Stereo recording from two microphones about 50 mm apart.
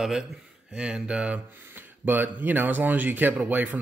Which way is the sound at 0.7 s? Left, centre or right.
Centre.